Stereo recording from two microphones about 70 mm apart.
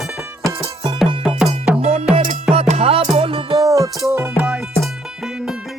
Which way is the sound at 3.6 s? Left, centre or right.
Right.